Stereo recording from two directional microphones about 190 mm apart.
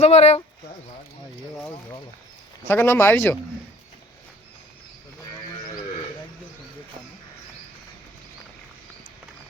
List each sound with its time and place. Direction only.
0.0 s speech: 35° left (ahead or behind)
2.6 s speech: 10° left (ahead or behind)